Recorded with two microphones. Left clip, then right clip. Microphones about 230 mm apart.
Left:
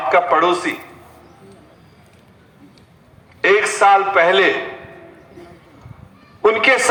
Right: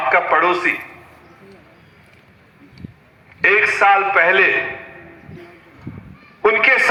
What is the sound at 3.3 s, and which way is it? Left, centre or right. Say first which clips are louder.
A man's voice: even; left.